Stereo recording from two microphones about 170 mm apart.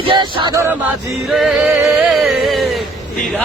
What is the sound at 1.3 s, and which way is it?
Music, centre (ahead or behind).